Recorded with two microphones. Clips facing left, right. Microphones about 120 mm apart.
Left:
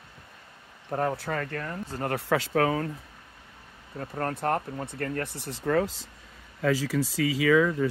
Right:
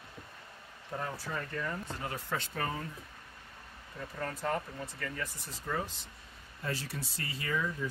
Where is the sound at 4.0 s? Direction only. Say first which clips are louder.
Left 7 dB; 65° left (ahead or behind).